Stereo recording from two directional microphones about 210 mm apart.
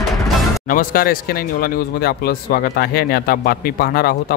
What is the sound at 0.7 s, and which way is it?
Speech, 40° left (ahead or behind).